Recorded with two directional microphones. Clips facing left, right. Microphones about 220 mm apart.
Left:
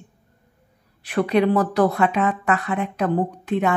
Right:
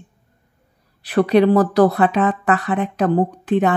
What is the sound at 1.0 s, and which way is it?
Speech, 35° right (ahead or behind).